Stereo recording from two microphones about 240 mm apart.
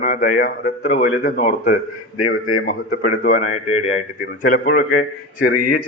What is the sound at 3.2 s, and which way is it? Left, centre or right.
A man's voice, left.